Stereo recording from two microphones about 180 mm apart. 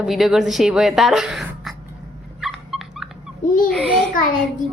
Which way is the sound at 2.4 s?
Centre (ahead or behind).